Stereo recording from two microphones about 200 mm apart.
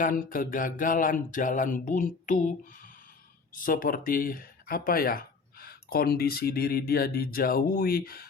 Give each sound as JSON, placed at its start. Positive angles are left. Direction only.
{"t": 0.0, "sound": "speech", "side_deg": 45}
{"t": 3.5, "sound": "speech", "side_deg": 45}